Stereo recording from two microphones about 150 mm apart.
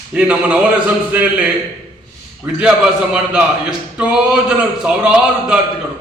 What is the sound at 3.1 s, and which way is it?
Speech, 10° right (ahead or behind).